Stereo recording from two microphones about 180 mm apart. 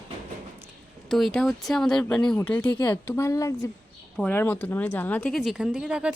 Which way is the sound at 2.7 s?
25° left (ahead or behind).